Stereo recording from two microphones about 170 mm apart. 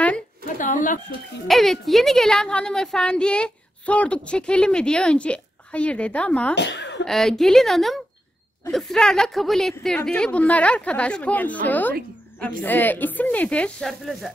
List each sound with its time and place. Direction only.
0.6 s speech: 50° left (ahead or behind)
1.5 s a woman's voice: centre (ahead or behind)
6.5 s a sound: 90° left
7.1 s a woman's voice: centre (ahead or behind)